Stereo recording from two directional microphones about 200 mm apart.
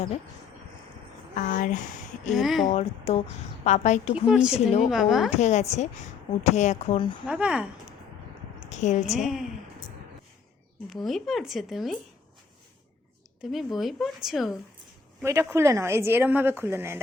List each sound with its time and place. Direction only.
1.4 s a woman's voice: 40° left (ahead or behind)
2.3 s speech: centre (ahead or behind)
2.6 s a woman's voice: 35° left (ahead or behind)
4.1 s speech: 5° right (ahead or behind)
5.4 s a woman's voice: 35° left (ahead or behind)
7.3 s speech: 5° right (ahead or behind)
8.7 s a woman's voice: 35° left (ahead or behind)
9.1 s speech: centre (ahead or behind)
10.8 s speech: centre (ahead or behind)
13.4 s speech: centre (ahead or behind)
15.2 s a woman's voice: 15° right (ahead or behind)